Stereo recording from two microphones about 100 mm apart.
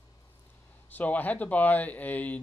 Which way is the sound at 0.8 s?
15° left (ahead or behind).